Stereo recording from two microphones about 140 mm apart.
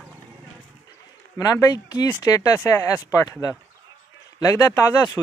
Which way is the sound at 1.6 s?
30° left (ahead or behind).